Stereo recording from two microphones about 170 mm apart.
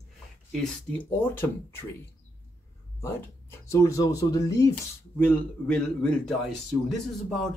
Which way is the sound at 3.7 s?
20° left (ahead or behind).